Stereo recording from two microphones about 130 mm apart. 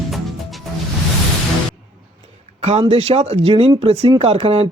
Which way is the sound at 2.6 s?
50° right (ahead or behind).